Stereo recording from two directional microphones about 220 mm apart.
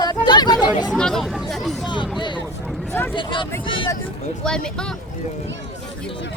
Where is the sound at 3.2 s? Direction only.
20° left (ahead or behind).